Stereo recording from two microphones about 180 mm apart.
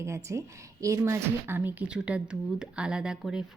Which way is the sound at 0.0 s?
15° right (ahead or behind).